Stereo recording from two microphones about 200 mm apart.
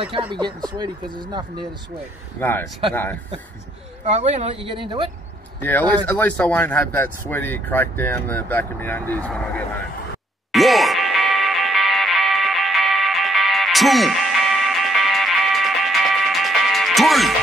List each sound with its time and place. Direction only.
0.3 s speech: 25° right (ahead or behind)
2.4 s speech: 10° left (ahead or behind)
4.0 s speech: 35° right (ahead or behind)
5.6 s speech: 10° left (ahead or behind)
10.5 s music: centre (ahead or behind)